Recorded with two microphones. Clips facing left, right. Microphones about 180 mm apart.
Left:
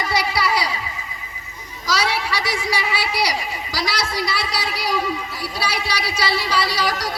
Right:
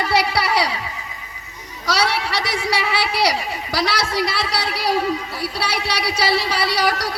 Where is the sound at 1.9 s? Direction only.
65° right (ahead or behind).